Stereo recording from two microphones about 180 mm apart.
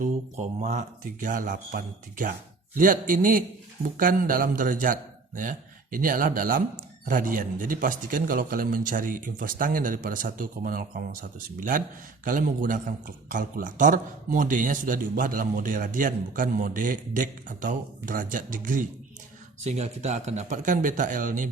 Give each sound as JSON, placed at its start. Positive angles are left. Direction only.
{"t": 0.0, "sound": "a man's voice", "side_deg": -40}
{"t": 19.6, "sound": "a man's voice", "side_deg": -35}